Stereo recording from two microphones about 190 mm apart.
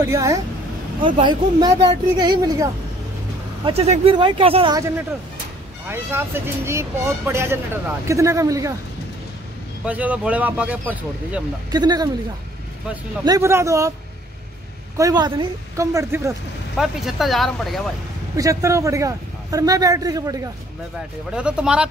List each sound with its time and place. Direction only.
0.0 s speech: 15° right (ahead or behind)
3.6 s speech: 35° right (ahead or behind)
4.7 s speech: 15° right (ahead or behind)
9.8 s speech: 10° right (ahead or behind)
11.7 s speech: 20° right (ahead or behind)
13.2 s speech: 15° right (ahead or behind)
15.0 s speech: 20° right (ahead or behind)
16.7 s speech: centre (ahead or behind)
18.3 s speech: 15° right (ahead or behind)
21.3 s speech: 5° right (ahead or behind)